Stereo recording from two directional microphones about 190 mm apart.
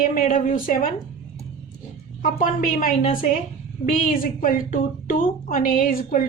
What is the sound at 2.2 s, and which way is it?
A woman's voice, 45° left (ahead or behind).